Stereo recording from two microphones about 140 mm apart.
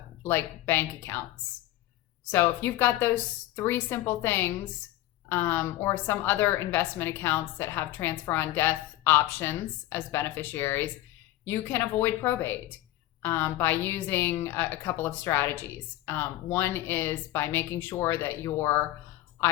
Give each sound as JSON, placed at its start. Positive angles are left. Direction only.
{"t": 0.2, "sound": "a woman's voice", "side_deg": 15}
{"t": 2.3, "sound": "a woman's voice", "side_deg": 15}